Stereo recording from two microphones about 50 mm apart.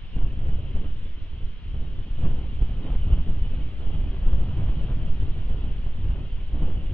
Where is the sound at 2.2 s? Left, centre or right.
Left.